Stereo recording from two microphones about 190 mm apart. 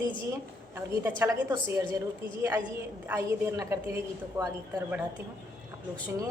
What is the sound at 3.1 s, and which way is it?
A woman's voice, 15° right (ahead or behind).